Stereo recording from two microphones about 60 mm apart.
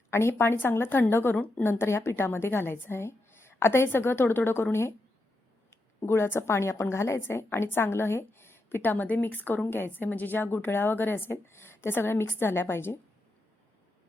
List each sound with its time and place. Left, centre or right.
0.1 s a woman's voice: left
6.1 s a woman's voice: left